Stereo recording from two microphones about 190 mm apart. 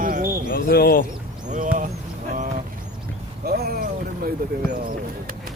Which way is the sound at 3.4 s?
55° right (ahead or behind).